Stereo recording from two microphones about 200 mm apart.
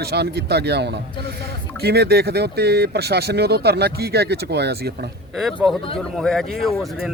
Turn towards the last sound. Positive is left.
turn(degrees=0)  # may be behind; listen again after turning